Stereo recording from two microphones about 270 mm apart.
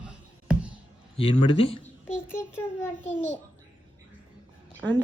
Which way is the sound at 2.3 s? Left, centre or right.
Centre.